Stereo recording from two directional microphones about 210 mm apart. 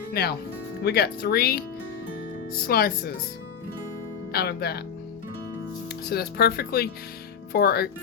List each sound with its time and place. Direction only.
0.1 s speech: 50° left (ahead or behind)
4.3 s speech: 50° left (ahead or behind)
6.1 s speech: 50° left (ahead or behind)